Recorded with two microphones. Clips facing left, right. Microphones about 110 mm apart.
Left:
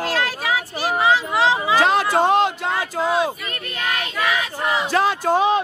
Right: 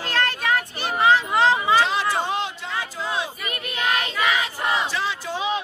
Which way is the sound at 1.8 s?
55° left (ahead or behind).